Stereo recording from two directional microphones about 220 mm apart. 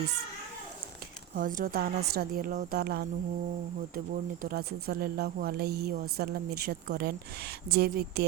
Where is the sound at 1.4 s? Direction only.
40° right (ahead or behind).